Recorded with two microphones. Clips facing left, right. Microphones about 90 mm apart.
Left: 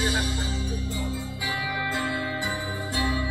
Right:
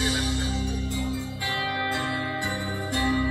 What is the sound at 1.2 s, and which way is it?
Music, 5° left (ahead or behind).